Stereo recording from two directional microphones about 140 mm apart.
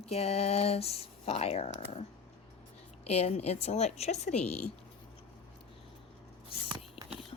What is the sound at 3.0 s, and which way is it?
Speech, 50° left (ahead or behind).